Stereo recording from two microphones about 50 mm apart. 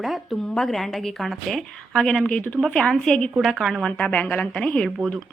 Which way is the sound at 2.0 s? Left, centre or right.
Centre.